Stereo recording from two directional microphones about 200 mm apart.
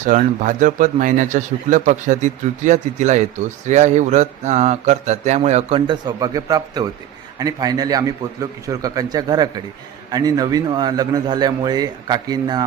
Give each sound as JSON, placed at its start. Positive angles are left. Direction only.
{"t": 0.0, "sound": "a man's voice", "side_deg": -40}